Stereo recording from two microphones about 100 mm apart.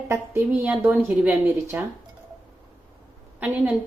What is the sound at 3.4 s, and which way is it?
Speech, 15° right (ahead or behind).